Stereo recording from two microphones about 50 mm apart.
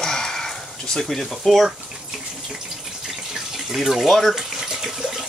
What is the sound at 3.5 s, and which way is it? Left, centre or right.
Speech, centre.